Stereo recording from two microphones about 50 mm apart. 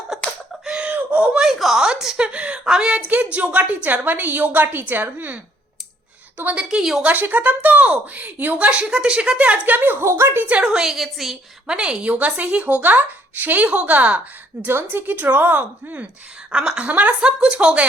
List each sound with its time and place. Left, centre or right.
0.1 s a sound: centre
0.9 s a sound: right
1.3 s a sound: centre
1.5 s a woman's voice: centre
3.3 s a woman's voice: right
6.6 s a woman's voice: centre
7.0 s a woman's voice: right
9.4 s a woman's voice: right
10.0 s a woman's voice: right
10.6 s a woman's voice: centre
11.6 s a woman's voice: centre; by 14.2 s right
14.7 s a woman's voice: right
16.5 s a woman's voice: centre
17.2 s a woman's voice: centre